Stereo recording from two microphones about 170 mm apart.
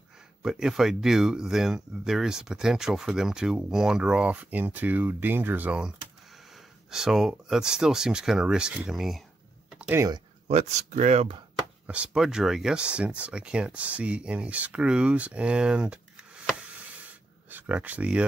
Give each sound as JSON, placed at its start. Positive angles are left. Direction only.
{"t": 0.4, "sound": "speech", "side_deg": 0}
{"t": 9.7, "sound": "typing", "side_deg": -10}
{"t": 10.5, "sound": "speech", "side_deg": -40}
{"t": 11.8, "sound": "speech", "side_deg": -5}
{"t": 17.5, "sound": "speech", "side_deg": -10}